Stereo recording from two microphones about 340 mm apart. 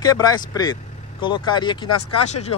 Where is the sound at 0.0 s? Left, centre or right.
Centre.